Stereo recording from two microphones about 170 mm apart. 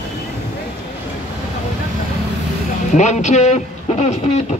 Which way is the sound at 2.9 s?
45° left (ahead or behind).